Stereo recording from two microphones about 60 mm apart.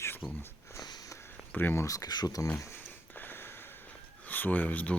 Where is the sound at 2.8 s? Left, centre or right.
Left.